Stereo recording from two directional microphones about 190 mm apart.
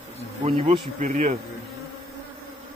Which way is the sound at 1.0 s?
40° right (ahead or behind).